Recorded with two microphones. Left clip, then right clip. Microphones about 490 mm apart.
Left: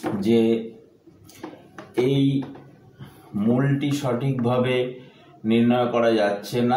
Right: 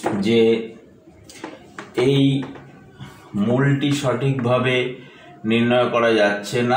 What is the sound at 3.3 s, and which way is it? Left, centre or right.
Speech, left.